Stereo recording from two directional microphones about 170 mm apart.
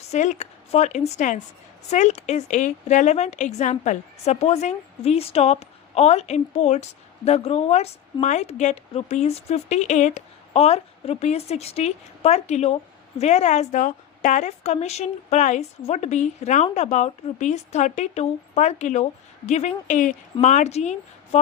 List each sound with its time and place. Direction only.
0.1 s a woman's voice: 45° left (ahead or behind)